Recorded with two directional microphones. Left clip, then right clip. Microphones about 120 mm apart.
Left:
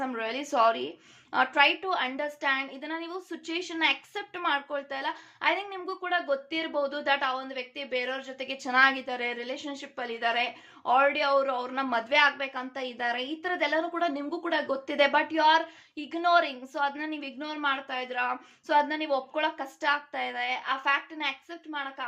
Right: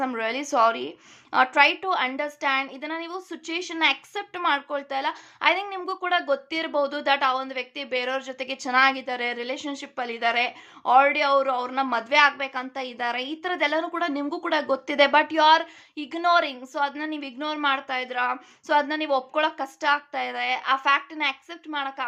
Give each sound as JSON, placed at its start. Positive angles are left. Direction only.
{"t": 0.0, "sound": "a woman's voice", "side_deg": -45}
{"t": 8.7, "sound": "a woman's voice", "side_deg": -25}